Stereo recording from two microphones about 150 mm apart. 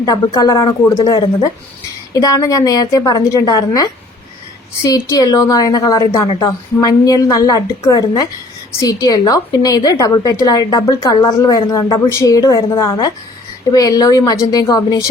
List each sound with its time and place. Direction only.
0.0 s a woman's voice: 25° left (ahead or behind)